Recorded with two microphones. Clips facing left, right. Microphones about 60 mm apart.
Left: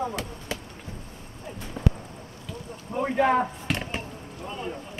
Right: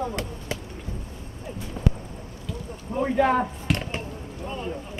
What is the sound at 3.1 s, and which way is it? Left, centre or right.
Chop, centre.